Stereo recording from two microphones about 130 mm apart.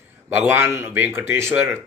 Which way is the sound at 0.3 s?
15° right (ahead or behind).